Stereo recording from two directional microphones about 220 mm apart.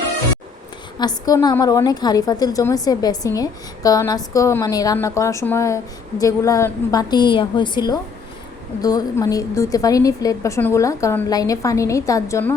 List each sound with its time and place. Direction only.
0.9 s a woman's voice: 15° left (ahead or behind)